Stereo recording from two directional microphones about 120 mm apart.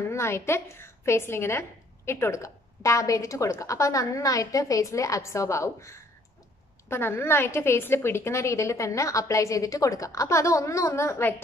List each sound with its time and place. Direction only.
0.1 s a woman's voice: 20° left (ahead or behind)